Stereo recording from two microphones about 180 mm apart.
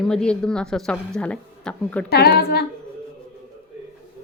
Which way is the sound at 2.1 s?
60° left (ahead or behind).